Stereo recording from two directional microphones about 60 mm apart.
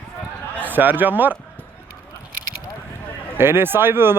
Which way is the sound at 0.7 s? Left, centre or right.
Right.